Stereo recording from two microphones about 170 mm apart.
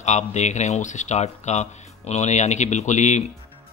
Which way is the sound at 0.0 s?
45° left (ahead or behind).